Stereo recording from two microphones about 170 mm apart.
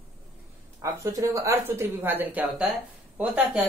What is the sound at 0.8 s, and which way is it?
A man's voice, 20° right (ahead or behind).